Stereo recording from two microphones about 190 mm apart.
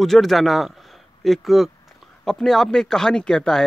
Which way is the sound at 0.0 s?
Centre (ahead or behind).